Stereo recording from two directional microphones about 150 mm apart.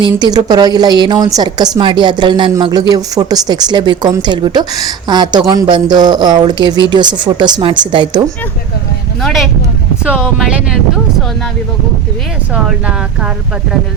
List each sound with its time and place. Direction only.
0.0 s a woman's voice: 25° right (ahead or behind)
9.2 s speech: centre (ahead or behind)